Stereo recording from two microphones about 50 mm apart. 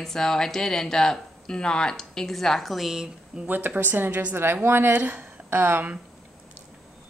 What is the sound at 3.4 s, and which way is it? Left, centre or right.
A woman's voice, right.